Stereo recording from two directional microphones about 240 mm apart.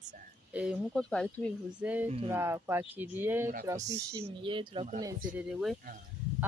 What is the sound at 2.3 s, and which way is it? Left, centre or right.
Speech, centre.